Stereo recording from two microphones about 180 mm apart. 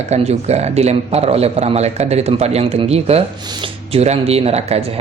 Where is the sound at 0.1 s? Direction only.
35° right (ahead or behind).